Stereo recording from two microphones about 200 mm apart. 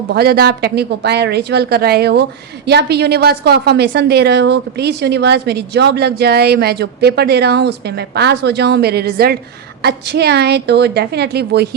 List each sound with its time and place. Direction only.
0.1 s a woman's voice: 50° right (ahead or behind)